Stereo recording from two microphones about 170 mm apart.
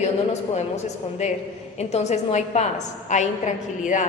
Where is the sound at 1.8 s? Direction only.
40° left (ahead or behind).